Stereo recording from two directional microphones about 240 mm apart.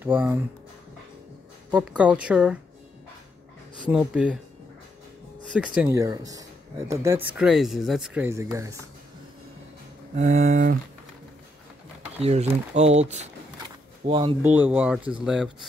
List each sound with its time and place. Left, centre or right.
0.0 s speech: centre
1.7 s a woman's voice: centre
3.9 s a woman's voice: centre
5.8 s speech: centre
10.1 s speech: right
12.2 s speech: right
14.4 s a woman's voice: centre